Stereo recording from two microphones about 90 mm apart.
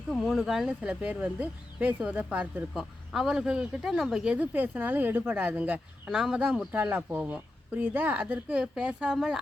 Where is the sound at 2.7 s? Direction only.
5° right (ahead or behind).